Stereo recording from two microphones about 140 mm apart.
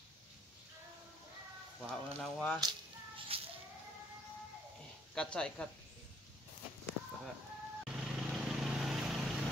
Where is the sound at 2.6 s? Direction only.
35° right (ahead or behind).